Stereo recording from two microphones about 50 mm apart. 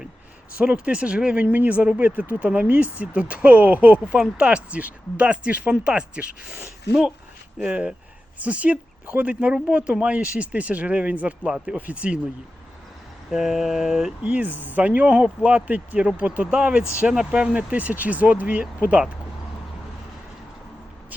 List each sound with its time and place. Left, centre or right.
0.5 s speech: right
1.5 s speech: right
13.3 s a sound: centre
14.3 s speech: right
17.7 s speech: right